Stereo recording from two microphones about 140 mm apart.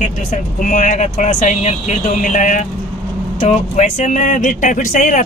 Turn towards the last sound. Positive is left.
turn(degrees=65)  # may be behind; listen again after turning